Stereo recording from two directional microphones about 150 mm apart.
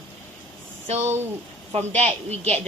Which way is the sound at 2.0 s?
45° right (ahead or behind).